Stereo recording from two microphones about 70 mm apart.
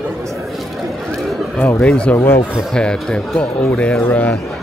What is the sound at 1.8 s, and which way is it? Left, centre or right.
Speech, centre.